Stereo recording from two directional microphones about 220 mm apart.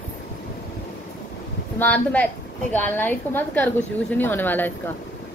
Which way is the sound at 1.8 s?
5° left (ahead or behind).